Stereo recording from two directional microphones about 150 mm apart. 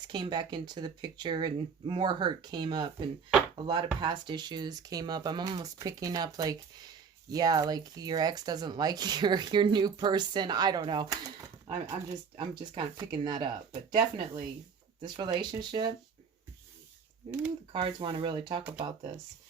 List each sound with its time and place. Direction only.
0.1 s speech: 30° right (ahead or behind)
17.7 s speech: 35° right (ahead or behind)